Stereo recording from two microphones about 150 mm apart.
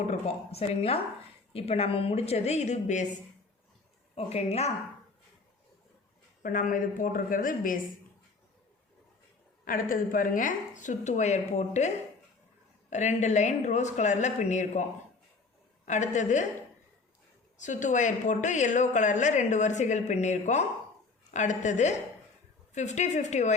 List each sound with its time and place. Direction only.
0.1 s a woman's voice: 40° left (ahead or behind)
4.1 s a woman's voice: 45° left (ahead or behind)
6.4 s a woman's voice: 60° left (ahead or behind)
9.6 s a woman's voice: 70° left (ahead or behind); by 11.9 s 50° left (ahead or behind)
12.9 s a woman's voice: 50° left (ahead or behind)
15.9 s a woman's voice: 55° left (ahead or behind)
17.6 s a woman's voice: 55° left (ahead or behind)